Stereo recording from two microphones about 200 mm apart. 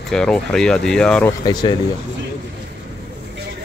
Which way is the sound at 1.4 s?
20° left (ahead or behind).